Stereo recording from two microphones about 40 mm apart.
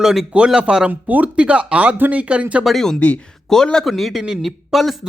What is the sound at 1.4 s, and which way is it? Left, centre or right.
Speech, right.